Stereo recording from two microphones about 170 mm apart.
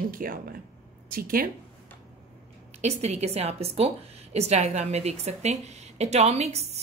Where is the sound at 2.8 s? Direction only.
40° right (ahead or behind).